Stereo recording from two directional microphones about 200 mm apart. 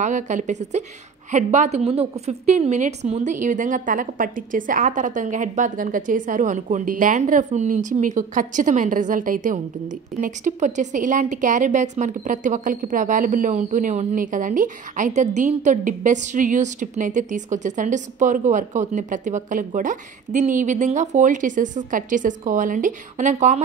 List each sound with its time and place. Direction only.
0.0 s a woman's voice: 40° right (ahead or behind)